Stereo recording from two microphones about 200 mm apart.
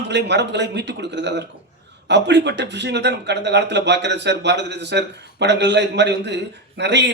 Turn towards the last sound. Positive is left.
turn(degrees=-60)  # may be behind; listen again after turning